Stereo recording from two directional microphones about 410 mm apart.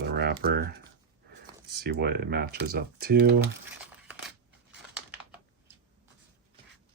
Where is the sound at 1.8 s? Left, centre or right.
Right.